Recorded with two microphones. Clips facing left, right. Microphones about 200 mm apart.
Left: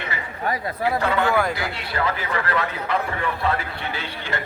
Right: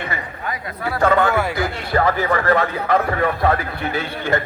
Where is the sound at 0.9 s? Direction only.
45° right (ahead or behind).